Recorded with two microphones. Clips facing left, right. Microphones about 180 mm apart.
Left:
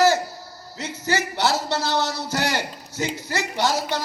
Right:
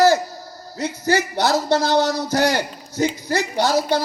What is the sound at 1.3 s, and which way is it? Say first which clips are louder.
A man's voice: right 5 dB; 15° right (ahead or behind).